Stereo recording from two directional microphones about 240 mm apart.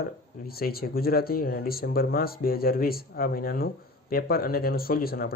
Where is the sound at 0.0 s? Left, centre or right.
Left.